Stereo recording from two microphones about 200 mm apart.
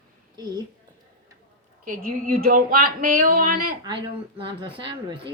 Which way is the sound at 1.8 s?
45° right (ahead or behind).